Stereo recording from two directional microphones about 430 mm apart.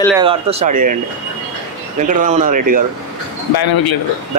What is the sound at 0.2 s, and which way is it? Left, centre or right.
Speech, centre.